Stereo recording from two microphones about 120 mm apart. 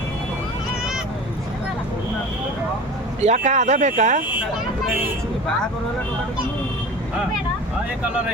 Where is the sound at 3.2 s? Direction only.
80° right.